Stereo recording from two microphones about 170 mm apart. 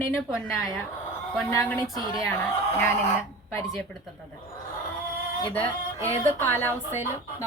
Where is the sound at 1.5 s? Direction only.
20° left (ahead or behind).